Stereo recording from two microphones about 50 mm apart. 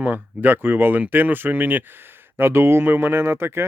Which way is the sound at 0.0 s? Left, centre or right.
Right.